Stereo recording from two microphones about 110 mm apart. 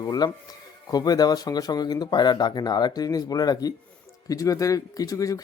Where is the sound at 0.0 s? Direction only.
35° left (ahead or behind).